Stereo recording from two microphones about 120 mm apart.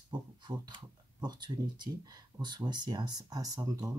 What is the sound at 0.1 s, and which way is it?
Speech, 40° right (ahead or behind).